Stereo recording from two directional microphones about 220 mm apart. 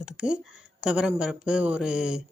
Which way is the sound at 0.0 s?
5° right (ahead or behind).